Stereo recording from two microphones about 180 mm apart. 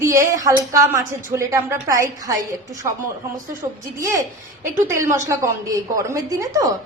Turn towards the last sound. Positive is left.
turn(degrees=-20)  # may be behind; listen again after turning